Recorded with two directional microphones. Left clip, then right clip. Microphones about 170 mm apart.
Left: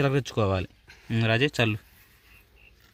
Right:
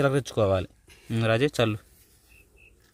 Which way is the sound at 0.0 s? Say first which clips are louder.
Right 2 dB; centre (ahead or behind).